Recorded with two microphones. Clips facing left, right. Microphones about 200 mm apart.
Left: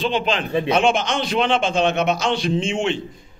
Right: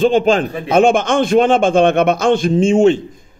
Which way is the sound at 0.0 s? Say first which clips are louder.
Right 9 dB; 45° right (ahead or behind).